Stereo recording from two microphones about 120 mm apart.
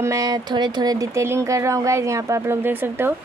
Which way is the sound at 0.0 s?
30° right (ahead or behind).